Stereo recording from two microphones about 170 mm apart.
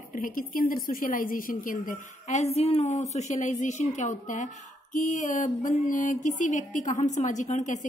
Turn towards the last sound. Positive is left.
turn(degrees=45)  # may be behind; listen again after turning